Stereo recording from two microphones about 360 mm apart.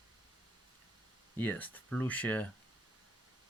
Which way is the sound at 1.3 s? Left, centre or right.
Centre.